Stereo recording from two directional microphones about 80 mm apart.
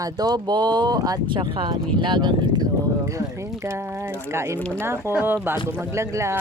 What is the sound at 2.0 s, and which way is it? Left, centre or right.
Speech, right.